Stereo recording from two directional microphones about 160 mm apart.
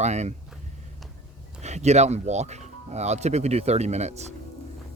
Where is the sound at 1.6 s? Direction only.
45° right (ahead or behind).